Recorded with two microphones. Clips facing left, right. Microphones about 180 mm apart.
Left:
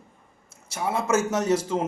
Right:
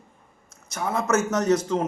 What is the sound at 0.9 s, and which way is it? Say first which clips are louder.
Speech: right 1 dB; 30° left (ahead or behind).